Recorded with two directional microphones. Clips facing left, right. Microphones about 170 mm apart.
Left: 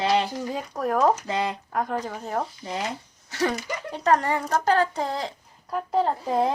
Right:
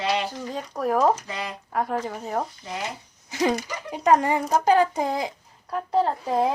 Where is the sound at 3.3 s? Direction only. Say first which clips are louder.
Right 2 dB; 15° right (ahead or behind).